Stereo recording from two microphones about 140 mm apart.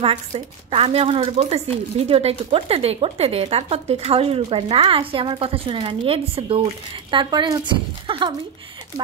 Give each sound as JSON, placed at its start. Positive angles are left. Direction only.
{"t": 0.0, "sound": "speech", "side_deg": -40}